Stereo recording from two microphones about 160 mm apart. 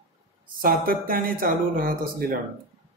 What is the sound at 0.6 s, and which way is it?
Speech, 65° right (ahead or behind).